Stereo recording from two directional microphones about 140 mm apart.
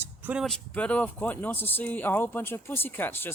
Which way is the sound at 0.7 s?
10° left (ahead or behind).